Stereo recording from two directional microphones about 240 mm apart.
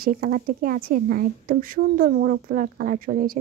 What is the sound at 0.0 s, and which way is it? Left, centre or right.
Speech, right.